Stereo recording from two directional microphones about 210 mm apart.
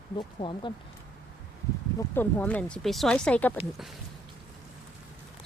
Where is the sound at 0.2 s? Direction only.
25° left (ahead or behind).